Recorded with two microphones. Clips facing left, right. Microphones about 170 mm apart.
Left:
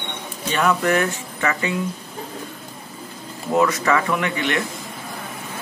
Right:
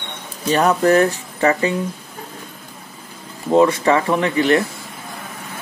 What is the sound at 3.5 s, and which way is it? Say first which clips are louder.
Speech: right 5 dB; 30° right (ahead or behind).